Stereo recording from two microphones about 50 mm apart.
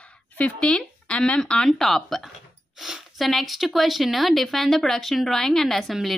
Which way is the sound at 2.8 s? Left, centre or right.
Centre.